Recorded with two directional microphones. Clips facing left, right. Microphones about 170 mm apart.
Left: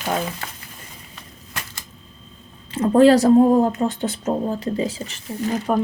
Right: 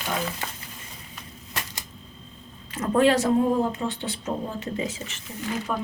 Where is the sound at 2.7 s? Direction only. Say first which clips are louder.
Left 7 dB; 30° left (ahead or behind).